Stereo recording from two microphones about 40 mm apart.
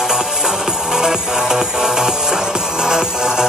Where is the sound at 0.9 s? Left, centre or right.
Centre.